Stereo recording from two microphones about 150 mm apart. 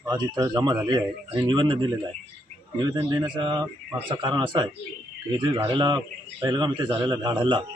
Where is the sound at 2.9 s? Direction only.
30° right (ahead or behind).